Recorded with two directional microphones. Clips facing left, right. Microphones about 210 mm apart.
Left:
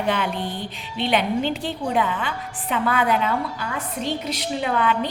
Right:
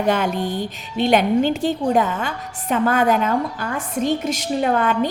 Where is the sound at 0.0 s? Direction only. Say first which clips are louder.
Right 4 dB; 45° right (ahead or behind).